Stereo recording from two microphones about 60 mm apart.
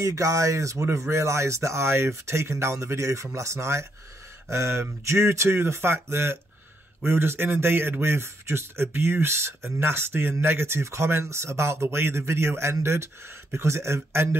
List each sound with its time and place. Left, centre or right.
0.0 s speech: right
0.8 s a man's voice: right